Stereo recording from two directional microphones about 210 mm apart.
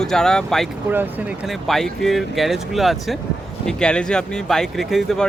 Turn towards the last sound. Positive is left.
turn(degrees=0)  # may be behind; listen again after turning